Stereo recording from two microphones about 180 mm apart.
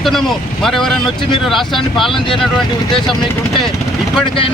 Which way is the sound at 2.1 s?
30° left (ahead or behind).